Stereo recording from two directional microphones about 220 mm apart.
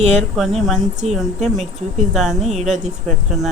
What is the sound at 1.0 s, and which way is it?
Speech, 30° right (ahead or behind).